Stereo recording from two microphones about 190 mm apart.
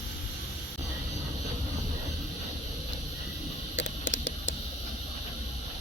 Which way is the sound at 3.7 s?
75° left (ahead or behind).